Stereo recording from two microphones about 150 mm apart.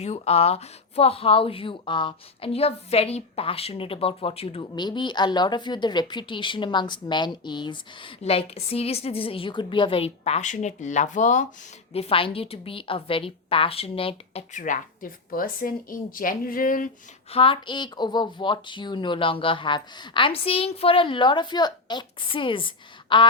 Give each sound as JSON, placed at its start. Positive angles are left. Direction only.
{"t": 0.0, "sound": "speech", "side_deg": 45}
{"t": 4.7, "sound": "speech", "side_deg": 30}
{"t": 11.9, "sound": "speech", "side_deg": 40}
{"t": 14.5, "sound": "speech", "side_deg": 60}
{"t": 17.3, "sound": "speech", "side_deg": 35}